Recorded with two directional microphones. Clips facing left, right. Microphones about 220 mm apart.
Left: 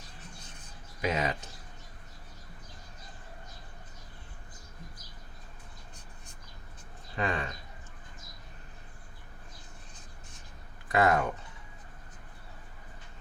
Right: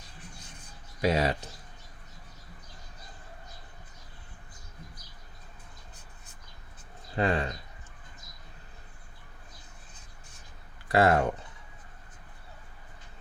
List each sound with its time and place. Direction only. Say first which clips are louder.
1.0 s speech: right 4 dB; 35° right (ahead or behind)
7.2 s speech: right 5 dB; 35° right (ahead or behind)
10.8 s speech: right 3 dB; 30° right (ahead or behind)